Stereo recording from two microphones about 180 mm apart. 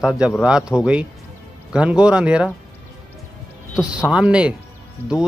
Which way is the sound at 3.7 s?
5° right (ahead or behind).